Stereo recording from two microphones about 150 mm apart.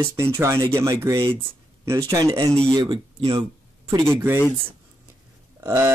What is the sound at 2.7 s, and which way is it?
Speech, 35° right (ahead or behind).